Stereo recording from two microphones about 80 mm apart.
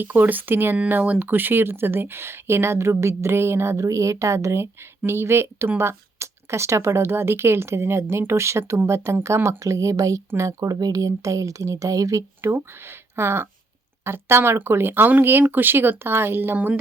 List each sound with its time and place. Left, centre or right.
0.0 s speech: right
12.4 s speech: right